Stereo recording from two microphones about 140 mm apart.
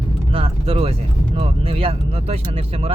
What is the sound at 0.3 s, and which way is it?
Speech, 45° right (ahead or behind).